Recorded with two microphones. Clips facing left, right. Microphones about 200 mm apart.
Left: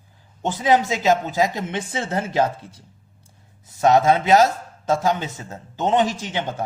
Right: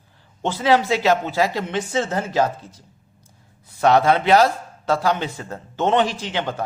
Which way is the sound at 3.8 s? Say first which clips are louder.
Even; 20° left (ahead or behind).